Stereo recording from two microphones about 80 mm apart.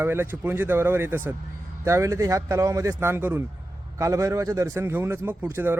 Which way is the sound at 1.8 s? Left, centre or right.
Right.